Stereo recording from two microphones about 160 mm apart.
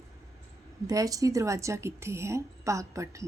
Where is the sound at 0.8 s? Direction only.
20° right (ahead or behind).